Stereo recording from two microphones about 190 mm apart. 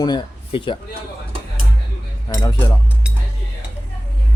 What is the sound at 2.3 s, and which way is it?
Speech, 20° left (ahead or behind).